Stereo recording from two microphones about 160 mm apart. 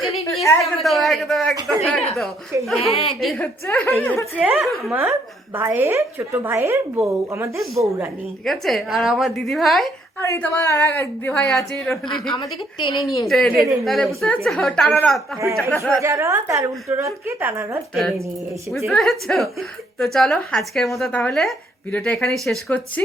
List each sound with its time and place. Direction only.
0.6 s a woman's voice: centre (ahead or behind)
2.8 s a woman's voice: 40° left (ahead or behind)
3.1 s a woman's voice: centre (ahead or behind)
4.4 s a woman's voice: 5° right (ahead or behind)
4.9 s a woman's voice: 15° right (ahead or behind)
8.4 s a woman's voice: centre (ahead or behind)
10.2 s speech: 10° left (ahead or behind)
11.4 s a woman's voice: centre (ahead or behind)
12.3 s a woman's voice: 30° left (ahead or behind)
13.2 s a woman's voice: 5° left (ahead or behind)
16.0 s a woman's voice: 15° right (ahead or behind)
18.9 s a woman's voice: centre (ahead or behind)